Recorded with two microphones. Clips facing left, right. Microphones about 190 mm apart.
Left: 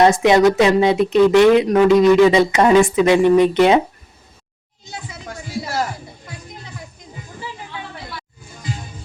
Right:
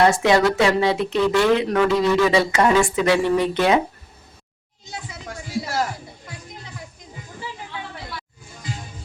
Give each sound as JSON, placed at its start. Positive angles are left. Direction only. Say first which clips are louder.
{"t": 0.0, "sound": "speech", "louder": "left 4 dB", "side_deg": 20}